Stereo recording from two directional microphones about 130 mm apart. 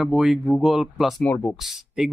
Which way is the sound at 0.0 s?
5° right (ahead or behind).